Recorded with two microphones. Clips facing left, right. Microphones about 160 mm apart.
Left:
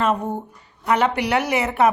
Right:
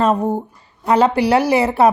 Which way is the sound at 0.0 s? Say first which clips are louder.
Right 5 dB; 30° right (ahead or behind).